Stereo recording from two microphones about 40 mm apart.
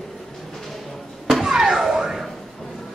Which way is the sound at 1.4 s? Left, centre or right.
Centre.